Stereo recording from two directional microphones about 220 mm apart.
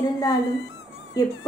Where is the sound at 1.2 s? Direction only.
15° left (ahead or behind).